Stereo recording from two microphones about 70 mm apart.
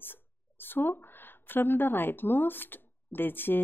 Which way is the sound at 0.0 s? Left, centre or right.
Left.